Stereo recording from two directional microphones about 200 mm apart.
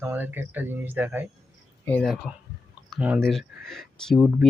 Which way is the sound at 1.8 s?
5° left (ahead or behind).